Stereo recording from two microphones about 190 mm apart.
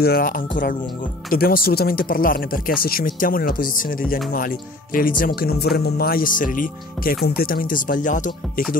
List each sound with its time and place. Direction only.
0.0 s speech: 50° left (ahead or behind)